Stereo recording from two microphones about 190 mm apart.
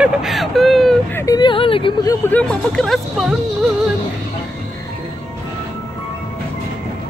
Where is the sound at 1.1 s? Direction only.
20° left (ahead or behind).